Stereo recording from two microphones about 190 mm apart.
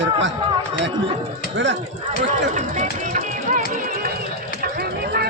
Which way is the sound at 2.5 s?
45° right (ahead or behind).